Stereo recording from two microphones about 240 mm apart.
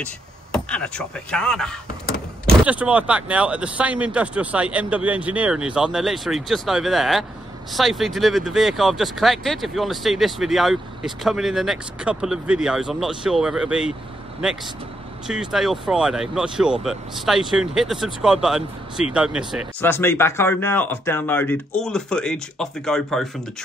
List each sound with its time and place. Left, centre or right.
0.0 s speech: centre
15.2 s speech: centre
19.8 s speech: centre